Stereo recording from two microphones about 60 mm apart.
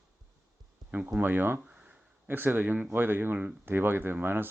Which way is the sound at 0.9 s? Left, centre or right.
Right.